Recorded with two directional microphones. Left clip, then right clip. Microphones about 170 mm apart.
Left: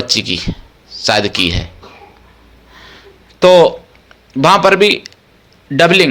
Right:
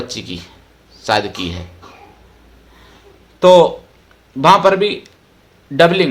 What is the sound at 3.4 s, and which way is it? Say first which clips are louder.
Speech: left 1 dB; 20° left (ahead or behind).